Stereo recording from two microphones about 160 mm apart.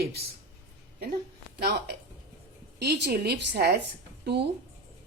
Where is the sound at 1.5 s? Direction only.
75° right (ahead or behind).